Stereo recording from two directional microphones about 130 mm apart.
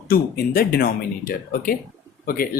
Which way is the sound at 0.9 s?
90° left.